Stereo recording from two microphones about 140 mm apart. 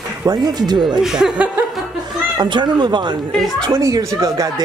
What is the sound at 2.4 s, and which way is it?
Speech, 35° right (ahead or behind).